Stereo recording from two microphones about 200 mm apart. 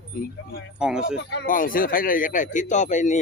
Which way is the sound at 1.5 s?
45° left (ahead or behind).